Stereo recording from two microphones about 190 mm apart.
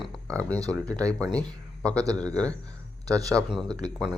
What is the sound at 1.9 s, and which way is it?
Speech, 20° right (ahead or behind).